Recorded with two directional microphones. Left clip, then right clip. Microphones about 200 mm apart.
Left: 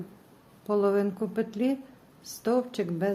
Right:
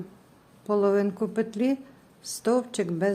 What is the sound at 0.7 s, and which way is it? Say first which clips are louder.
A woman's voice: right 2 dB; 15° right (ahead or behind).